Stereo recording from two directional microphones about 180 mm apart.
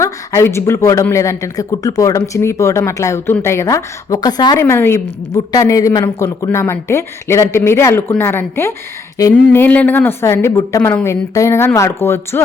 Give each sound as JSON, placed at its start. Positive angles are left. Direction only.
{"t": 0.0, "sound": "a woman's voice", "side_deg": 15}